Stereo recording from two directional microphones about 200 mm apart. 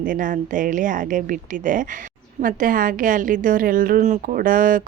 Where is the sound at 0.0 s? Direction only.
40° right (ahead or behind).